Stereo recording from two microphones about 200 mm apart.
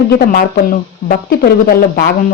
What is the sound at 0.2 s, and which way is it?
Speech, 45° left (ahead or behind).